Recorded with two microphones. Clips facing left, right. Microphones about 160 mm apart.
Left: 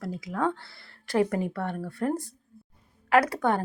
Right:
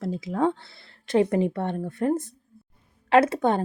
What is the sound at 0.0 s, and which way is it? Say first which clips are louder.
A woman's voice: right 4 dB; 25° right (ahead or behind).